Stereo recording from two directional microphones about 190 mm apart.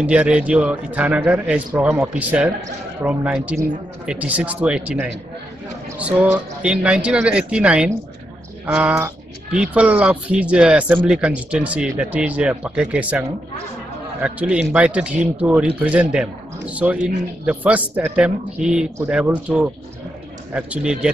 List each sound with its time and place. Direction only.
0.0 s speech: 5° right (ahead or behind)